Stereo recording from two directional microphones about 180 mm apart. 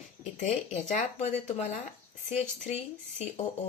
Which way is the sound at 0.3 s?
40° left (ahead or behind).